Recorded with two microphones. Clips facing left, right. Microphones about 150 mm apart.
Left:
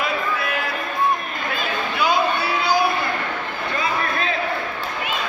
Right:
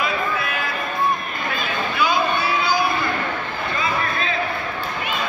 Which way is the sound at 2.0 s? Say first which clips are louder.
Left 1 dB; 65° left (ahead or behind).